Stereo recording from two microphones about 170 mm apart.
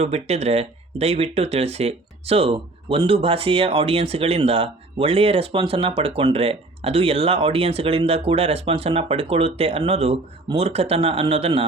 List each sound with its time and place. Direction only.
0.0 s speech: 40° right (ahead or behind)